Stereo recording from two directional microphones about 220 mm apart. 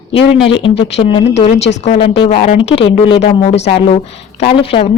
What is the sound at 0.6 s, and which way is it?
Speech, 25° left (ahead or behind).